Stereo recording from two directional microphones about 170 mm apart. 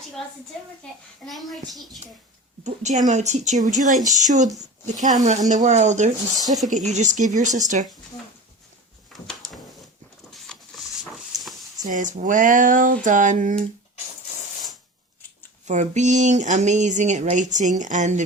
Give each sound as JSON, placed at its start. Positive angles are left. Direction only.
{"t": 1.2, "sound": "a child's voice", "side_deg": 0}
{"t": 2.6, "sound": "speech", "side_deg": -45}
{"t": 9.1, "sound": "a sound", "side_deg": 0}
{"t": 10.3, "sound": "printer", "side_deg": 0}
{"t": 11.9, "sound": "speech", "side_deg": -50}
{"t": 15.6, "sound": "speech", "side_deg": -45}